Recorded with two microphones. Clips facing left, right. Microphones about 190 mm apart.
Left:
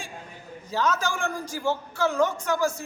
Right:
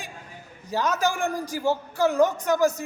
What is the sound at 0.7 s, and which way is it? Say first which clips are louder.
A man's voice: right 2 dB; 15° right (ahead or behind).